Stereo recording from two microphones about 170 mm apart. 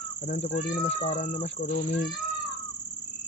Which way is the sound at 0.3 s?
45° left (ahead or behind).